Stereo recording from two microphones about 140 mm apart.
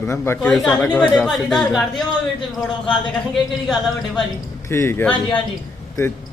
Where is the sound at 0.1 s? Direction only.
20° left (ahead or behind).